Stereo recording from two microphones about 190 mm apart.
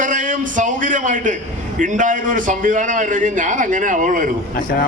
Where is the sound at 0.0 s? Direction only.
45° right (ahead or behind).